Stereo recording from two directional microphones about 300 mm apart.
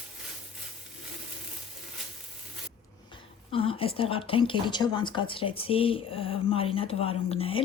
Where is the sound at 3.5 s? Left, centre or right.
Centre.